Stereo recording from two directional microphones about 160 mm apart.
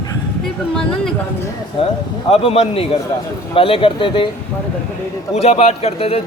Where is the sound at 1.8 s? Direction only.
35° left (ahead or behind).